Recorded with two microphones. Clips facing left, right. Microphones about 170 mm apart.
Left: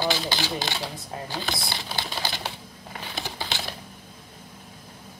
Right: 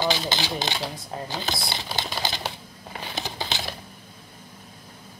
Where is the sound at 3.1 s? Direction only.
20° right (ahead or behind).